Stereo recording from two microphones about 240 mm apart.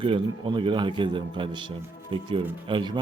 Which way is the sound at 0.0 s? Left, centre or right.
Centre.